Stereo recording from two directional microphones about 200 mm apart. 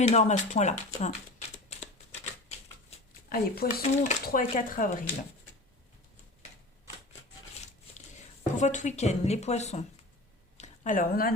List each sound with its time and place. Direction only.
0.0 s speech: 35° left (ahead or behind)
3.2 s speech: 50° left (ahead or behind)
3.8 s speech: 35° left (ahead or behind)
4.3 s speech: 45° left (ahead or behind)
7.9 s a woman's voice: 35° left (ahead or behind)